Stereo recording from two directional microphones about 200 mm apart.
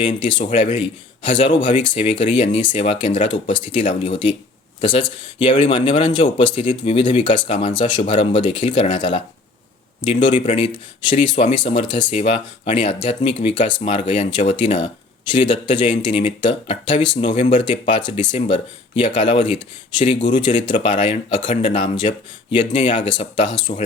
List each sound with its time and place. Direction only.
0.0 s speech: 25° left (ahead or behind)
10.4 s speech: 25° left (ahead or behind)